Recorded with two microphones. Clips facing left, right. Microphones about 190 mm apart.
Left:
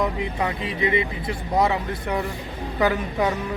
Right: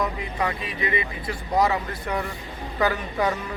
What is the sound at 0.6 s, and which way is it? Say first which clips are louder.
Speech: left 4 dB; 25° left (ahead or behind).